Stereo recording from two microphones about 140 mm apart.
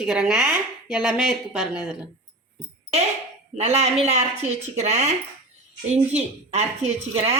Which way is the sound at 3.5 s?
50° right (ahead or behind).